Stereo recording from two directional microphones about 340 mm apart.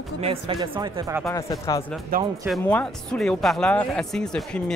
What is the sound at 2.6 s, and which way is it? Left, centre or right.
Speech, centre.